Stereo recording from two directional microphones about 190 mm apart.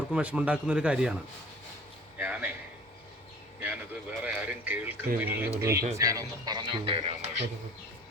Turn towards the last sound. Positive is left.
turn(degrees=-30)  # may be behind; listen again after turning